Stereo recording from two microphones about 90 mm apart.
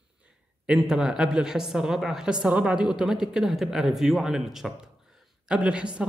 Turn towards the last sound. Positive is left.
turn(degrees=-10)  # may be behind; listen again after turning